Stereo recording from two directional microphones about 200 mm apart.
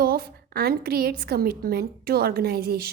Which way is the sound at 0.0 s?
50° right (ahead or behind).